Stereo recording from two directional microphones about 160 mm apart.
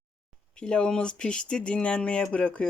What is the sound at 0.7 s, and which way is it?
Speech, 5° left (ahead or behind).